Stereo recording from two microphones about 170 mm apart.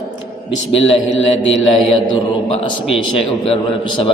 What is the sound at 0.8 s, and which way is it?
Mantra, 90° left.